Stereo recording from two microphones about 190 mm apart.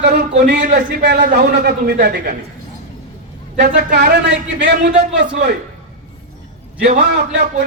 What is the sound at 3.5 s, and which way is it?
A man's voice, 60° right (ahead or behind).